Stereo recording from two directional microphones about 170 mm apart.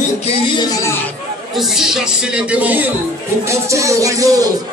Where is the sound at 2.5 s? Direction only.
10° right (ahead or behind).